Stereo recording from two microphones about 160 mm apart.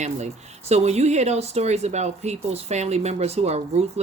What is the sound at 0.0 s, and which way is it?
Speech, 45° right (ahead or behind).